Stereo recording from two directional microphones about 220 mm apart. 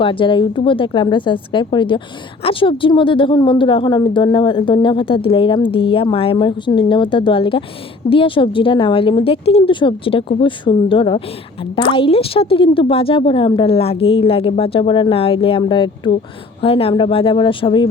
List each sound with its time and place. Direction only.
0.0 s a woman's voice: 25° left (ahead or behind)